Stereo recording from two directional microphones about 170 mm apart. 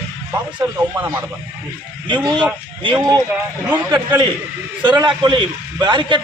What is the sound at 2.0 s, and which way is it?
A man's voice, 25° right (ahead or behind).